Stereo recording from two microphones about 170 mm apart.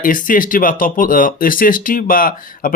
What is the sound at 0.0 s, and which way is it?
Speech, 55° left (ahead or behind).